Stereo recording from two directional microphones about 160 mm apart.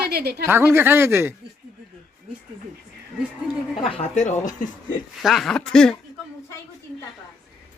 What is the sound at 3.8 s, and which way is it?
Speech, 40° left (ahead or behind).